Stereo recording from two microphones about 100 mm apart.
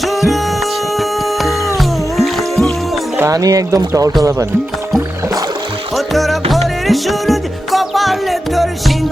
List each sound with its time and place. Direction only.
0.0 s music: centre (ahead or behind)
1.8 s music: centre (ahead or behind)
3.3 s speech: 35° right (ahead or behind)
6.0 s music: centre (ahead or behind)